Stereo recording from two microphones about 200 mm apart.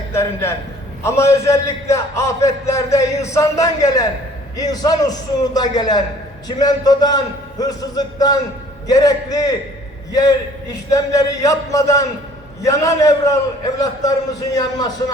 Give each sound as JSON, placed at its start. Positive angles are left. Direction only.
{"t": 0.1, "sound": "a man's voice", "side_deg": 15}